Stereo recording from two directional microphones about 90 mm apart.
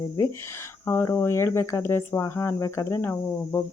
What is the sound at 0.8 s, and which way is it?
Speech, 25° left (ahead or behind).